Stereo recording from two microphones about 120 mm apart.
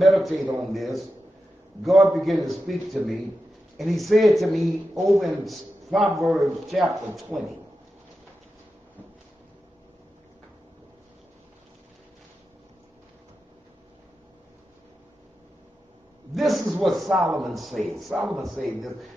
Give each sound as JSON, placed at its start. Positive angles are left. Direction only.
{"t": 0.0, "sound": "a man's voice", "side_deg": 0}
{"t": 16.3, "sound": "a man's voice", "side_deg": 0}